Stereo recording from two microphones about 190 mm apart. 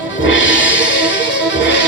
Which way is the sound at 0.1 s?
75° left (ahead or behind).